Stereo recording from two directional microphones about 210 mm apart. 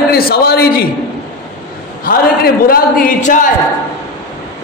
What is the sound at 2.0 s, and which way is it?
A man's voice, 45° left (ahead or behind).